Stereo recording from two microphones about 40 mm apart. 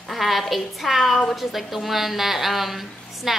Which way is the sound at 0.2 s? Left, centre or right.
Centre.